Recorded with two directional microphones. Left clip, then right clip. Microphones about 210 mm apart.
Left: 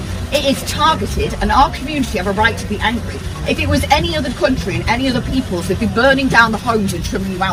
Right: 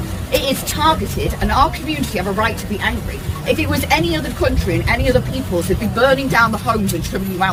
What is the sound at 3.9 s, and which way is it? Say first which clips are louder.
A woman's voice: left 1 dB; 20° right (ahead or behind).